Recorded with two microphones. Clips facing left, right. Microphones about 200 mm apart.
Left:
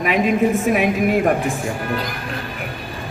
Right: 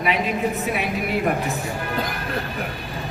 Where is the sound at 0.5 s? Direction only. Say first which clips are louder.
Left 7 dB; 45° left (ahead or behind).